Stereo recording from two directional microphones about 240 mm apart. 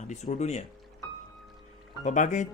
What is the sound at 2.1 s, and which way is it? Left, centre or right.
Speech, left.